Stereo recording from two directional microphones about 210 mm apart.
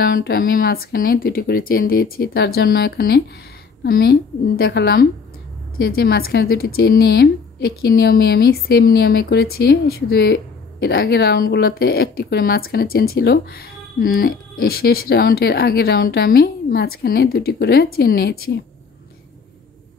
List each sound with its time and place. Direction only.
0.0 s a woman's voice: 45° left (ahead or behind)